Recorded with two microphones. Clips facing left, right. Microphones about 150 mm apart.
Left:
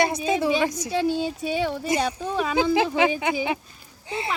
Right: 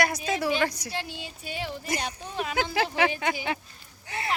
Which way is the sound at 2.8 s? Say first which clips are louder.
Left 4 dB; 20° left (ahead or behind).